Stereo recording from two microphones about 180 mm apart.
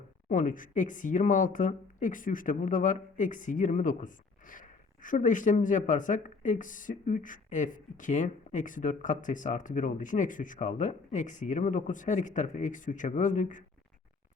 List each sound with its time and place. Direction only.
0.3 s speech: 45° left (ahead or behind)